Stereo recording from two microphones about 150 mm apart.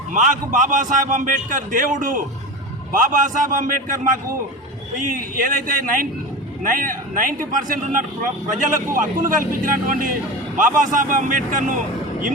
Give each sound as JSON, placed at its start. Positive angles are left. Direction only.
{"t": 0.1, "sound": "a man's voice", "side_deg": -55}